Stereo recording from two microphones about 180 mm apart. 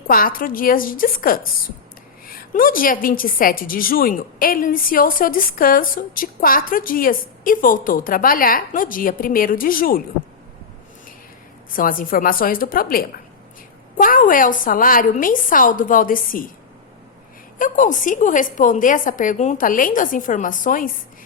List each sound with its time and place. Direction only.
0.1 s a woman's voice: 50° left (ahead or behind)
11.7 s a woman's voice: 50° left (ahead or behind)
17.6 s a woman's voice: 45° left (ahead or behind)